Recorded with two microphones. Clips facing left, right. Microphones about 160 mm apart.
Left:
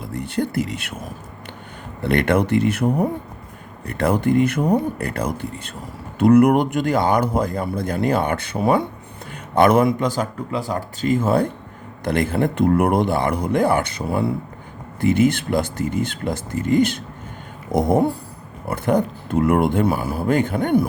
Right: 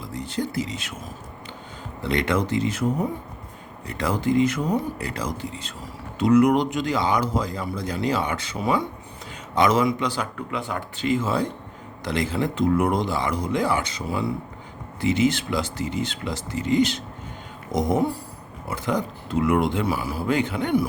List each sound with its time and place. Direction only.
0.0 s a man's voice: 60° left (ahead or behind)